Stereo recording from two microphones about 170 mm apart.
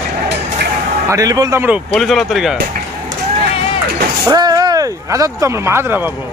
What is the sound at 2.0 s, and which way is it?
Speech, centre (ahead or behind).